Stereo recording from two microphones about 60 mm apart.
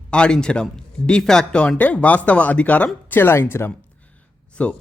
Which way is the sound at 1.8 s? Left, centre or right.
Left.